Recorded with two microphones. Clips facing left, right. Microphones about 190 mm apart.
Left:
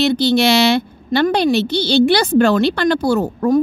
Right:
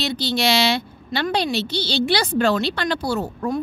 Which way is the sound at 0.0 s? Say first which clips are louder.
Left 8 dB; 55° left (ahead or behind).